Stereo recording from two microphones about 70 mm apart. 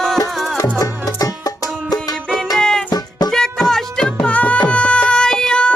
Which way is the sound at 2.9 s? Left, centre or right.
Left.